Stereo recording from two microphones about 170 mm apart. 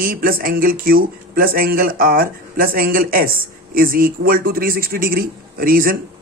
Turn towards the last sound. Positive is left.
turn(degrees=-60)  # may be behind; listen again after turning